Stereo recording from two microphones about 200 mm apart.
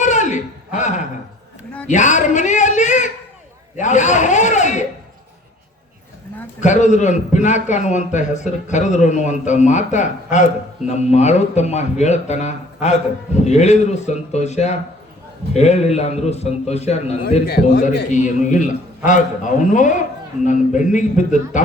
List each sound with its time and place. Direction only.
0.0 s a sound: 35° left (ahead or behind)
6.6 s a man's voice: 35° left (ahead or behind)
17.4 s a man's voice: 50° left (ahead or behind)
18.1 s a man's voice: 40° left (ahead or behind)